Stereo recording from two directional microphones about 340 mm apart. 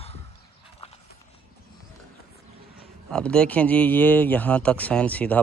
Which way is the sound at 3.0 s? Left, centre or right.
Centre.